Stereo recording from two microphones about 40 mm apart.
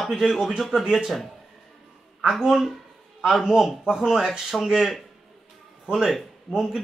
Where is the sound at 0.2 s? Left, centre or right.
Centre.